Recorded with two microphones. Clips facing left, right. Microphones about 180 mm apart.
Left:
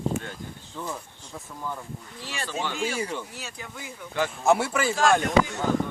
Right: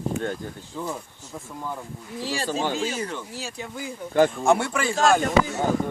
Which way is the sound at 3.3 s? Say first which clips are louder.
Right 6 dB; 30° right (ahead or behind).